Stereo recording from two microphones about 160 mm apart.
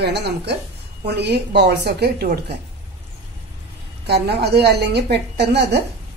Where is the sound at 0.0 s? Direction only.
90° right.